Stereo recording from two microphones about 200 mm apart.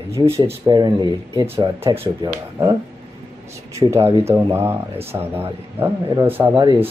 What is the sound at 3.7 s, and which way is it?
Speech, 15° right (ahead or behind).